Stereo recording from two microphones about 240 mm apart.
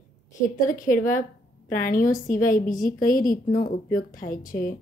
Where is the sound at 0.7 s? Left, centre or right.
Left.